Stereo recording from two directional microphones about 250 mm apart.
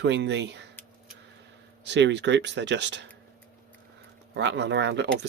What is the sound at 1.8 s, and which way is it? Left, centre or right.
Speech, right.